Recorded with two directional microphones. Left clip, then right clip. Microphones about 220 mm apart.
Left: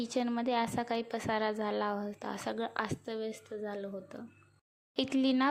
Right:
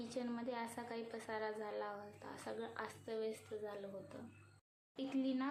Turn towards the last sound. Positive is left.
turn(degrees=40)  # may be behind; listen again after turning